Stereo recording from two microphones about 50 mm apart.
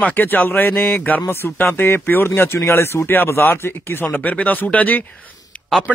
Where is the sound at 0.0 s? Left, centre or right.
Left.